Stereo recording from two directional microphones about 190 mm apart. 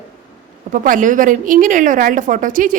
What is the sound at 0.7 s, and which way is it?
A woman's voice, 45° right (ahead or behind).